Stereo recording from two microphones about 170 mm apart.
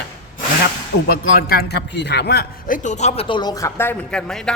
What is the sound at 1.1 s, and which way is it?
A man's voice, 60° left (ahead or behind).